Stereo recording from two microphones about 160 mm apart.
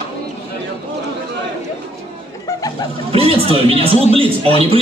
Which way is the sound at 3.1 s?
35° right (ahead or behind).